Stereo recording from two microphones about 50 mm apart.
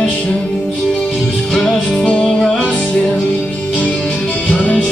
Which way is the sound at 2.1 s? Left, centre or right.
Left.